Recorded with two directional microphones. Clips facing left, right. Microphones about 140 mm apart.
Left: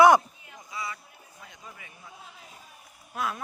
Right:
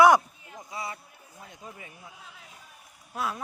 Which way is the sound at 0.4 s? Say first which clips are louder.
Right 1 dB; 30° right (ahead or behind).